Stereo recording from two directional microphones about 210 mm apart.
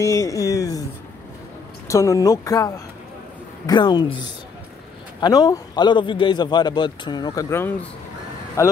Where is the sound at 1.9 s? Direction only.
15° left (ahead or behind).